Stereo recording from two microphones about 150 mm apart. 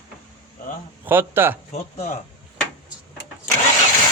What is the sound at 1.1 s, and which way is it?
Speech, 15° right (ahead or behind).